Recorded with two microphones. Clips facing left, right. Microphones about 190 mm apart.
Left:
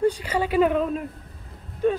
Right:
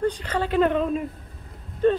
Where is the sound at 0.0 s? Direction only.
10° left (ahead or behind).